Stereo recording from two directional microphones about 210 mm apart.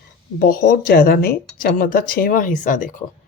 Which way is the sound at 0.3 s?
45° left (ahead or behind).